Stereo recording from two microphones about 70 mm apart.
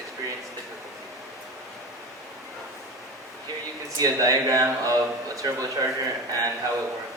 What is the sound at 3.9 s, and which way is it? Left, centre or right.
A man's voice, right.